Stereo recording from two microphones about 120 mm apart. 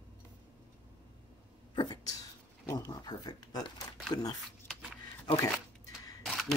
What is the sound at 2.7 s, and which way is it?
Speech, 35° left (ahead or behind).